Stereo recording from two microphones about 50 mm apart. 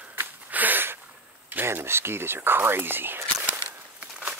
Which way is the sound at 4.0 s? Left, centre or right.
Right.